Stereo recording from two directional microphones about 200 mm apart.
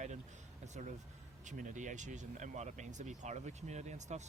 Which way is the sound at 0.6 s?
35° right (ahead or behind).